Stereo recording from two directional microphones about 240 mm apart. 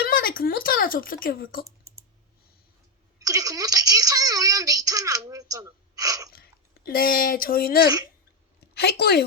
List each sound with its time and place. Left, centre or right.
0.0 s speech: left
3.2 s a child's voice: centre
6.3 s a woman's voice: left